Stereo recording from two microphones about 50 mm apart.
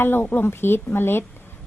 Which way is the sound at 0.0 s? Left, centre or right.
Left.